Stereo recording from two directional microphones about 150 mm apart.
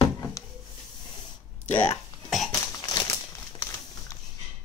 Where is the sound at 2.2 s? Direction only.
Centre (ahead or behind).